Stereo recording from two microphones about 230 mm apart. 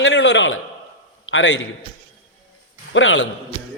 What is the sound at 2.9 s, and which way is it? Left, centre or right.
Speech, left.